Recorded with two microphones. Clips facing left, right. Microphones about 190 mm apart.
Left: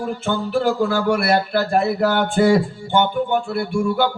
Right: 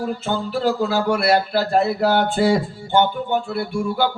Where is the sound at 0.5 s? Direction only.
50° left (ahead or behind).